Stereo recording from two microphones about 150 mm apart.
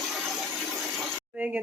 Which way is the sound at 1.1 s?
10° right (ahead or behind).